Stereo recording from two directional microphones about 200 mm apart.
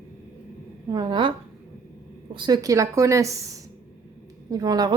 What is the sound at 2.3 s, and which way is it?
A woman's voice, 20° right (ahead or behind).